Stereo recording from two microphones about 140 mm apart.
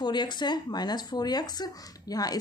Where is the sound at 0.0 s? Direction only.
30° left (ahead or behind).